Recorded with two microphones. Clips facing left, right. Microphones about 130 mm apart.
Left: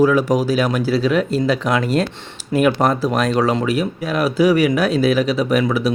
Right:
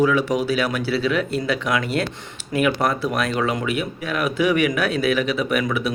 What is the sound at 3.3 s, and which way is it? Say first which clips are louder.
Speech: left 5 dB; 40° left (ahead or behind).